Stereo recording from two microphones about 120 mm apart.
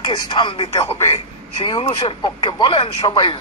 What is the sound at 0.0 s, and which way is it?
Speech, 45° left (ahead or behind).